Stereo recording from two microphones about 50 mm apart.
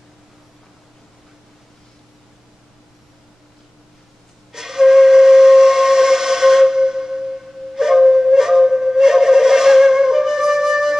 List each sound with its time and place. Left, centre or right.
4.5 s steam whistle: centre